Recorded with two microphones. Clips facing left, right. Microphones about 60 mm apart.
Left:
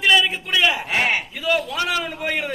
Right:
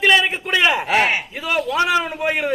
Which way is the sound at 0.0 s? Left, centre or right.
Right.